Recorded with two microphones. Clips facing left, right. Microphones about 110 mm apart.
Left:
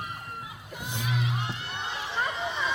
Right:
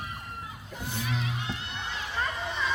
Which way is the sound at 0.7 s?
15° left (ahead or behind).